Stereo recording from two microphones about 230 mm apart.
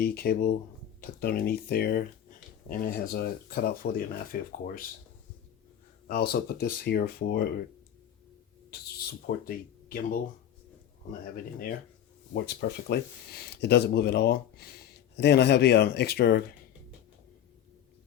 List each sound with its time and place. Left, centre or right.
0.0 s speech: left
6.3 s speech: left
8.7 s speech: left
12.3 s speech: left